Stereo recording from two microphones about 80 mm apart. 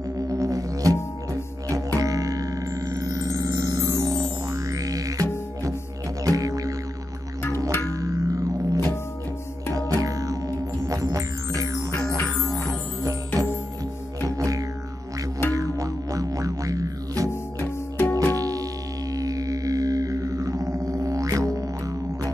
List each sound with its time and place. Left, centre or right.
0.3 s didgeridoo: right
6.2 s music: right
7.9 s music: right
17.3 s music: left
18.3 s music: right